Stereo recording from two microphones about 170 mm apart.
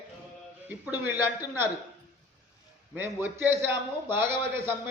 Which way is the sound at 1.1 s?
10° right (ahead or behind).